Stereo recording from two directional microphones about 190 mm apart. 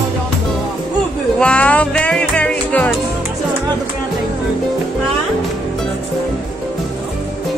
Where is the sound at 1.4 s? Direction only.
5° left (ahead or behind).